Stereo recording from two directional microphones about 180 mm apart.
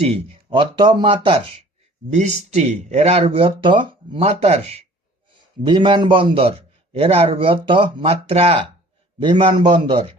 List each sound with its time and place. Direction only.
0.0 s speech: 30° right (ahead or behind)
2.1 s speech: 40° right (ahead or behind)